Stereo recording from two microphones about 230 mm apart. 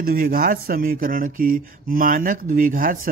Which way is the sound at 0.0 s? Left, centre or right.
Right.